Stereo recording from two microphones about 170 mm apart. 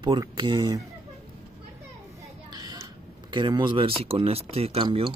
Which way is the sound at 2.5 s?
20° right (ahead or behind).